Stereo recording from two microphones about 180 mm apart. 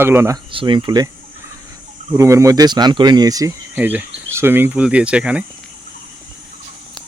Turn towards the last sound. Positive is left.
turn(degrees=-5)  # may be behind; listen again after turning